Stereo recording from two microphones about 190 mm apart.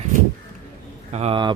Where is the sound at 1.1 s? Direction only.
35° right (ahead or behind).